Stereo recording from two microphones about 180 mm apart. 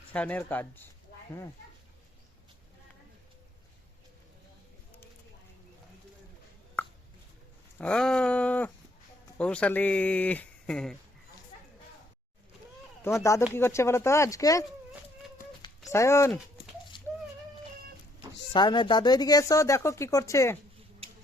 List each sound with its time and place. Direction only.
0.1 s speech: 10° left (ahead or behind)
6.8 s a sound: 10° left (ahead or behind)
7.8 s speech: 5° left (ahead or behind)
13.1 s speech: 15° left (ahead or behind)
15.9 s speech: 15° left (ahead or behind)
17.1 s a sound: 10° left (ahead or behind)
18.5 s speech: 25° left (ahead or behind)